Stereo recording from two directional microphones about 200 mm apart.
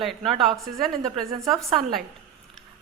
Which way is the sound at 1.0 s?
15° right (ahead or behind).